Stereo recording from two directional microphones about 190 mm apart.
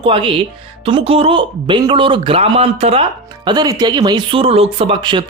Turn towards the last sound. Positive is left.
turn(degrees=-25)  # may be behind; listen again after turning